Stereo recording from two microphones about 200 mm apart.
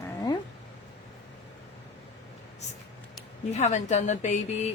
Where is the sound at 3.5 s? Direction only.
35° left (ahead or behind).